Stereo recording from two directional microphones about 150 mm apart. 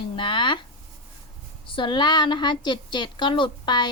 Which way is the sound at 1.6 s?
35° left (ahead or behind).